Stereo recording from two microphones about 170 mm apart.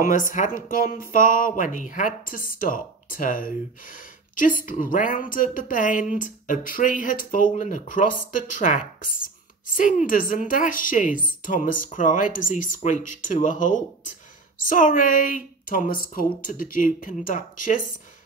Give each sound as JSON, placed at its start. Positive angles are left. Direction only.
{"t": 0.6, "sound": "speech", "side_deg": 55}